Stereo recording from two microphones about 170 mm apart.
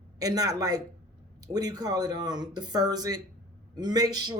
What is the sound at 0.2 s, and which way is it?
Speech, 20° right (ahead or behind).